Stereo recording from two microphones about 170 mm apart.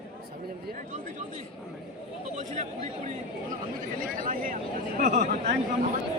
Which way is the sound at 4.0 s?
55° right (ahead or behind).